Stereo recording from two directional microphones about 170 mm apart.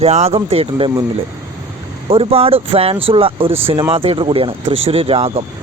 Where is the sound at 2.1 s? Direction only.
35° right (ahead or behind).